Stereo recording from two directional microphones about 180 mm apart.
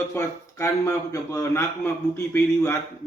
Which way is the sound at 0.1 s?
15° left (ahead or behind).